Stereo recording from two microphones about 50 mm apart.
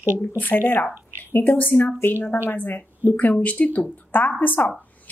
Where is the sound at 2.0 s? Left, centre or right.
Left.